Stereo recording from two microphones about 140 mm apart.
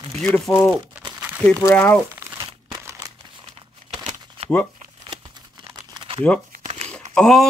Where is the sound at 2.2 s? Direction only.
25° right (ahead or behind).